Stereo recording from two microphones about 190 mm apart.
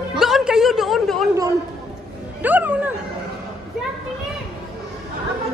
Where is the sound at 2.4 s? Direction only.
10° right (ahead or behind).